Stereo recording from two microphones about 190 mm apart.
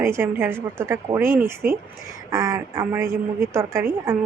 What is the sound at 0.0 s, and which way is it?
A woman's voice, 15° right (ahead or behind).